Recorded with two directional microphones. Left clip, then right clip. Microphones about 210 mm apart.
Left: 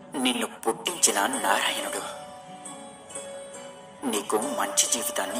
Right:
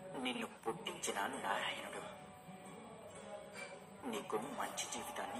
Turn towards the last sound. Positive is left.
turn(degrees=35)  # may be behind; listen again after turning